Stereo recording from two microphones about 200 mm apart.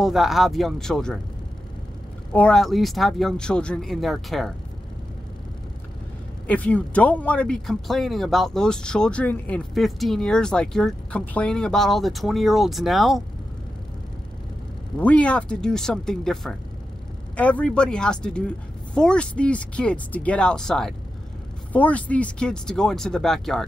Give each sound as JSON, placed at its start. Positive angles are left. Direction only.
{"t": 0.0, "sound": "speech", "side_deg": 0}
{"t": 2.3, "sound": "speech", "side_deg": 5}
{"t": 6.4, "sound": "speech", "side_deg": 5}
{"t": 15.0, "sound": "speech", "side_deg": 5}